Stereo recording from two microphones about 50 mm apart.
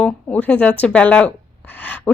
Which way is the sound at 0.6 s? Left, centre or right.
Left.